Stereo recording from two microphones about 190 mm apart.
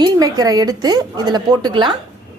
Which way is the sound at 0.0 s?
20° right (ahead or behind).